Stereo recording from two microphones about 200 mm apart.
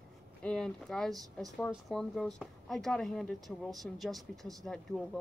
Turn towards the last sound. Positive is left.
turn(degrees=0)  # may be behind; listen again after turning